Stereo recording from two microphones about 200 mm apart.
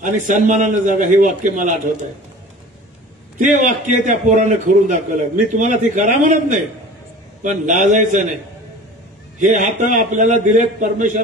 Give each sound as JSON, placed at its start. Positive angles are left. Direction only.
{"t": 0.0, "sound": "a man's voice", "side_deg": -40}
{"t": 3.3, "sound": "a man's voice", "side_deg": -40}
{"t": 9.4, "sound": "a man's voice", "side_deg": -40}